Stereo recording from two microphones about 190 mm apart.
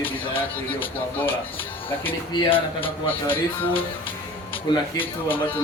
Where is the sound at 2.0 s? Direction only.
30° left (ahead or behind).